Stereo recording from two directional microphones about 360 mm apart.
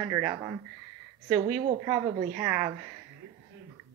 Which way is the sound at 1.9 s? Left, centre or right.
Centre.